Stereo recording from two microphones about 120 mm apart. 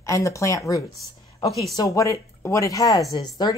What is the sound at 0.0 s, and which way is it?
Speech, 25° left (ahead or behind).